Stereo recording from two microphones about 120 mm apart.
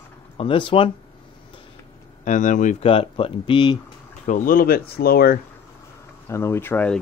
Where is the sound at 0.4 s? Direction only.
45° left (ahead or behind).